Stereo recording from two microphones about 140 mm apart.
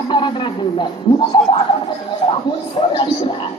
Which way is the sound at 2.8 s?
40° left (ahead or behind).